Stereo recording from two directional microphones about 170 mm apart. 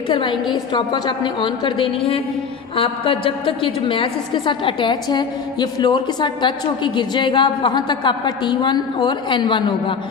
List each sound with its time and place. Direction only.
0.1 s a woman's voice: 25° left (ahead or behind)